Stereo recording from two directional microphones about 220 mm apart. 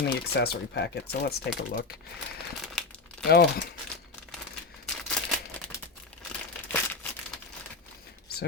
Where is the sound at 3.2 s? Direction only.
50° left (ahead or behind).